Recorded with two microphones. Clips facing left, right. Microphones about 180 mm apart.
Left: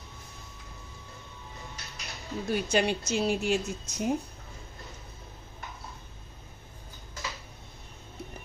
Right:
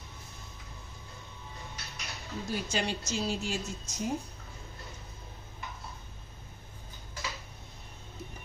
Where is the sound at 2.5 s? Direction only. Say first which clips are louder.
Left 7 dB; 60° left (ahead or behind).